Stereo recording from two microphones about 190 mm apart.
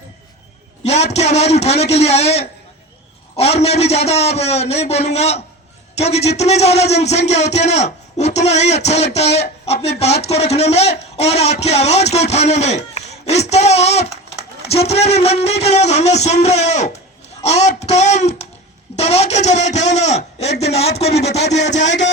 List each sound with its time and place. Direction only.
0.9 s speech: 35° left (ahead or behind)
21.7 s speech: 70° left (ahead or behind)